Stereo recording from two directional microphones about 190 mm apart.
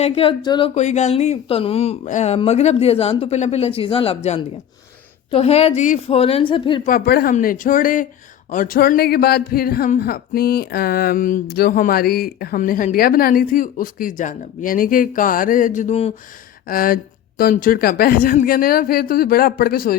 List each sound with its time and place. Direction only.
0.0 s speech: 30° left (ahead or behind)
0.7 s speech: 35° left (ahead or behind)
6.8 s speech: 50° left (ahead or behind)
7.3 s speech: 45° left (ahead or behind)
16.6 s speech: 50° left (ahead or behind)